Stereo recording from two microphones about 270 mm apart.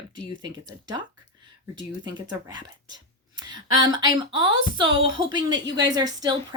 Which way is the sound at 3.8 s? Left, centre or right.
Centre.